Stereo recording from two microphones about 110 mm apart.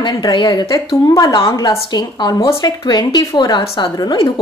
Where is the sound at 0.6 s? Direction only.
30° left (ahead or behind).